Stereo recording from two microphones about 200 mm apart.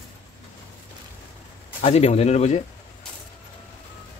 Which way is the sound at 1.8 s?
30° left (ahead or behind).